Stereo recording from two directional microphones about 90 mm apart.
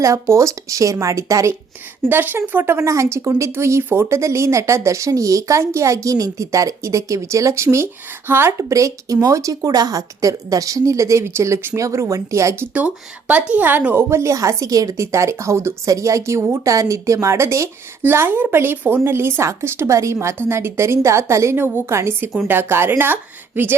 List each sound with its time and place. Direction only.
0.0 s speech: 35° right (ahead or behind)
2.0 s speech: 20° right (ahead or behind)
12.7 s a woman's voice: 15° right (ahead or behind)
14.1 s a woman's voice: 35° right (ahead or behind)